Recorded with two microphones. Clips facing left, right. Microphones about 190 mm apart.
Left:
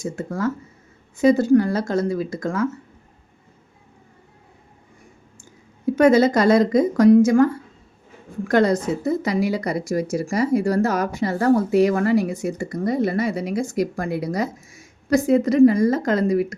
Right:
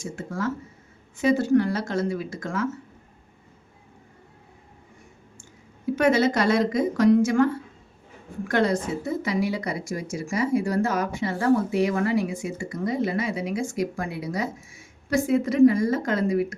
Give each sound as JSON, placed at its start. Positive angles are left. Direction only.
{"t": 0.0, "sound": "a woman's voice", "side_deg": 40}
{"t": 6.0, "sound": "a woman's voice", "side_deg": 40}